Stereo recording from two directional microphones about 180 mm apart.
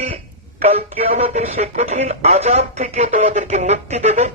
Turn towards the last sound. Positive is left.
turn(degrees=-40)  # may be behind; listen again after turning